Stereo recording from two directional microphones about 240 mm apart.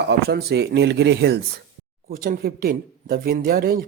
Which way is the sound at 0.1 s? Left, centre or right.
Right.